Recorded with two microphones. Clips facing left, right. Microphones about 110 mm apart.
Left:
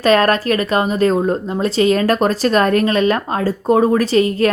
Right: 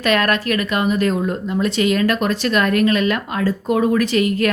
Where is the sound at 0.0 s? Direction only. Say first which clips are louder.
Left 5 dB; 35° left (ahead or behind).